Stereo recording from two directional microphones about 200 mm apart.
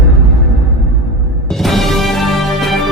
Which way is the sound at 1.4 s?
Centre (ahead or behind).